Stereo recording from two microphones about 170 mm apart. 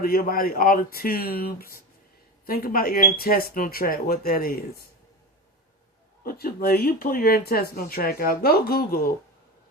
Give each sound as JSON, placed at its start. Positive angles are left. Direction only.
{"t": 0.0, "sound": "speech", "side_deg": 60}
{"t": 6.2, "sound": "speech", "side_deg": 60}